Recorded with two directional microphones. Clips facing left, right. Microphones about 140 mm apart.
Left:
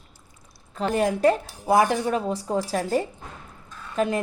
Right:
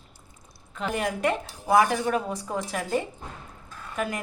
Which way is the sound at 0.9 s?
30° left (ahead or behind).